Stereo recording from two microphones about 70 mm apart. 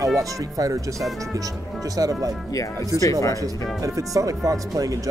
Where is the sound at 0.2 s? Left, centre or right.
Right.